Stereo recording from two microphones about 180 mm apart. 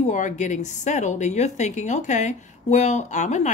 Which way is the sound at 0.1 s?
45° left (ahead or behind).